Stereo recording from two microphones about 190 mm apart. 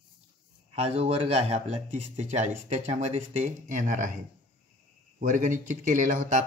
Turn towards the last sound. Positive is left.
turn(degrees=-40)  # may be behind; listen again after turning